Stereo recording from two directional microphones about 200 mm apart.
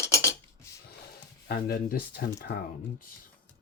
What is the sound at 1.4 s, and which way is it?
Speech, 50° left (ahead or behind).